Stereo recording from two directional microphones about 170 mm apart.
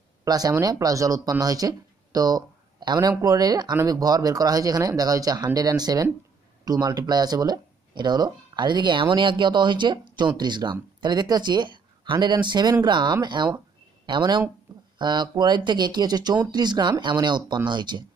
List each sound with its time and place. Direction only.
0.2 s speech: 20° right (ahead or behind)